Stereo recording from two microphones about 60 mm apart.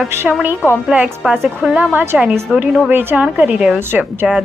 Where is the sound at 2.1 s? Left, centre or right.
Centre.